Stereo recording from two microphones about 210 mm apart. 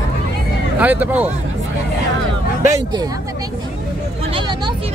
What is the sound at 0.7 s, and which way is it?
Speech, 5° right (ahead or behind).